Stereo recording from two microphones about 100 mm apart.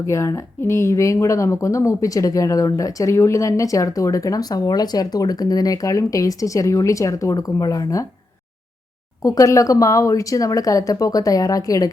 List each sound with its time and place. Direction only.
0.0 s speech: 30° left (ahead or behind)
9.2 s speech: 35° left (ahead or behind)